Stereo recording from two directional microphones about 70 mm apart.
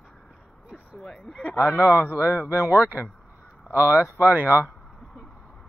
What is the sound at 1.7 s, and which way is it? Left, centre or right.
Speech, left.